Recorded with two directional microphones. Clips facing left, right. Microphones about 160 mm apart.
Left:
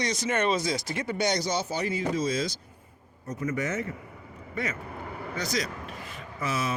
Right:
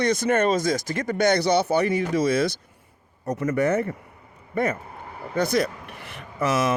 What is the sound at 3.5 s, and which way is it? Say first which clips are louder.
A man's voice: right 9 dB; 60° right (ahead or behind).